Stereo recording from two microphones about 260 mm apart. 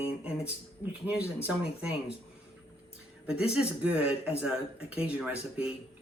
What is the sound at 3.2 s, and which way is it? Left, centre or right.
Speech, centre.